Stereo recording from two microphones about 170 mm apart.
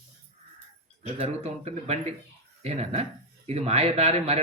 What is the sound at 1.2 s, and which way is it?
Speech, 40° right (ahead or behind).